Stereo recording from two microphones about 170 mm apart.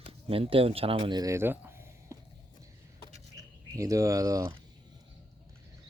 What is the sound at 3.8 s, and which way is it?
Speech, 20° right (ahead or behind).